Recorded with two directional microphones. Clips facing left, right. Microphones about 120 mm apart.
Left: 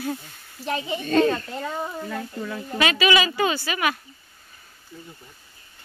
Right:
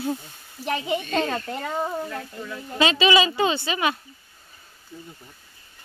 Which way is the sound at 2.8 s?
25° right (ahead or behind).